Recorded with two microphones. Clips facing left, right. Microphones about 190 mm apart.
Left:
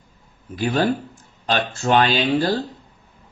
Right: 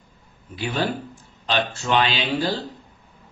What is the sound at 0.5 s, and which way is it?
Speech, 45° left (ahead or behind).